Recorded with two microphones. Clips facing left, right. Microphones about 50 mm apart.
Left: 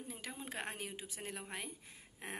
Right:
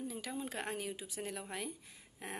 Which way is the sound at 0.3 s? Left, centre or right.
Left.